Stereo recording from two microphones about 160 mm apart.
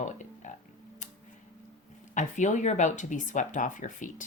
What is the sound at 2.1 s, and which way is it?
Speech, 50° left (ahead or behind).